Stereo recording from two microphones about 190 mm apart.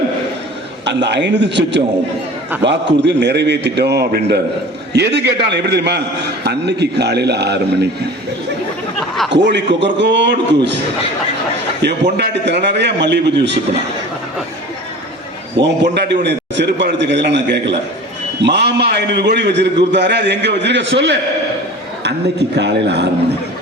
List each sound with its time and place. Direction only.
0.9 s a man's voice: 65° right (ahead or behind)
9.3 s a man's voice: 65° right (ahead or behind)
11.8 s a man's voice: 65° right (ahead or behind)
15.6 s a man's voice: 65° right (ahead or behind)